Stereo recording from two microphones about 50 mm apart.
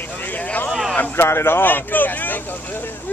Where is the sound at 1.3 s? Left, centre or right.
Left.